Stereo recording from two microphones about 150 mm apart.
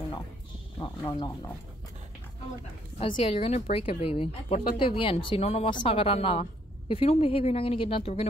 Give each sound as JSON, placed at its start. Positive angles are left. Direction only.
{"t": 0.7, "sound": "speech", "side_deg": 25}
{"t": 3.0, "sound": "a woman's voice", "side_deg": 45}